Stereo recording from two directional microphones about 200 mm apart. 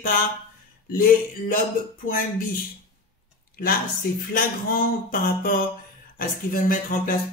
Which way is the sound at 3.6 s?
45° left (ahead or behind).